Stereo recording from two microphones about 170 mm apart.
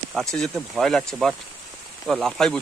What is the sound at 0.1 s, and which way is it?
Speech, centre (ahead or behind).